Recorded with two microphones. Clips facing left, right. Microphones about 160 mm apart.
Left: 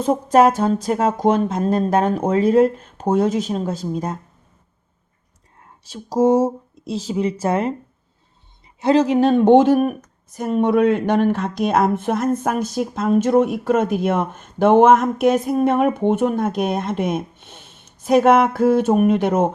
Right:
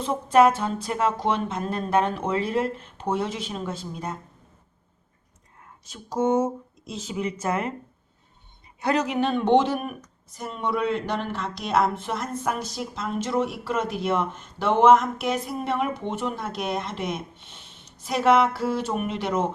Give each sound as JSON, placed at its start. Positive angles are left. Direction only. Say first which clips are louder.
{"t": 0.0, "sound": "speech", "louder": "left 4 dB", "side_deg": 45}
{"t": 5.8, "sound": "speech", "louder": "left 8 dB", "side_deg": 35}
{"t": 8.8, "sound": "speech", "louder": "left 9 dB", "side_deg": 25}